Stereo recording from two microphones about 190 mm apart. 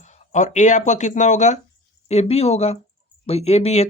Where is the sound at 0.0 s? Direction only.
40° left (ahead or behind).